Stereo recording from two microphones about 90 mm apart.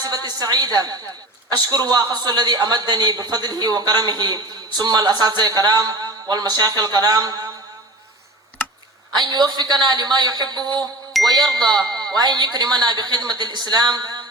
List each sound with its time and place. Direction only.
0.0 s a man's voice: 45° right (ahead or behind)
9.1 s a man's voice: 50° right (ahead or behind)